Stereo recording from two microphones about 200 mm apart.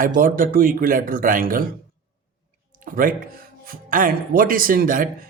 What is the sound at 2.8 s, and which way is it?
A man's voice, 45° right (ahead or behind).